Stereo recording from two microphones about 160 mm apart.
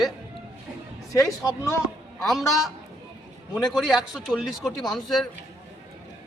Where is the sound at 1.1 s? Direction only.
20° left (ahead or behind).